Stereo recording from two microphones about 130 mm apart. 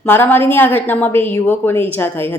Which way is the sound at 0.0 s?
15° left (ahead or behind).